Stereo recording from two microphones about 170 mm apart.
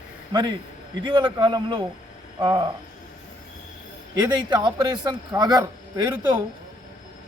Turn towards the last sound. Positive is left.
turn(degrees=-25)  # may be behind; listen again after turning